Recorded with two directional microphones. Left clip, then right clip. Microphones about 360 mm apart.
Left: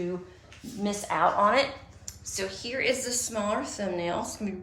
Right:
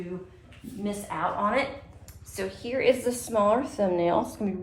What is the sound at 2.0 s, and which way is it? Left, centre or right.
A woman's voice, centre.